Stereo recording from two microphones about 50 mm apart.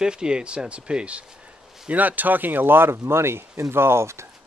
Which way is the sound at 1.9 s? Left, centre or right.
Right.